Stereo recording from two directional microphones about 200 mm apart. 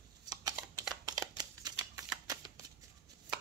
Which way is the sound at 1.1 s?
20° right (ahead or behind).